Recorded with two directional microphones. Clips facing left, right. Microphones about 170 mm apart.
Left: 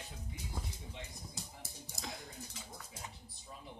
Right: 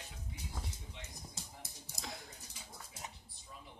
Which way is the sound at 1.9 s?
Centre (ahead or behind).